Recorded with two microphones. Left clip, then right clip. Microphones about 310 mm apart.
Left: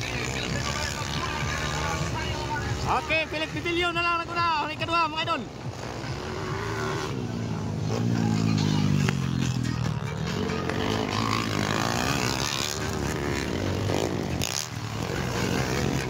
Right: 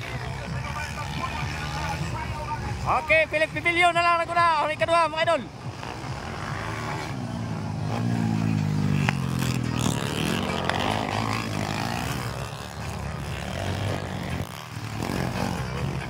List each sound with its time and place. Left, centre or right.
2.9 s speech: centre
11.1 s vehicle: centre